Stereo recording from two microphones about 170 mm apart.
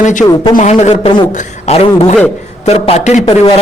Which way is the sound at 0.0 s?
45° left (ahead or behind).